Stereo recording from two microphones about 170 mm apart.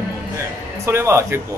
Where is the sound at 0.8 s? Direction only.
15° right (ahead or behind).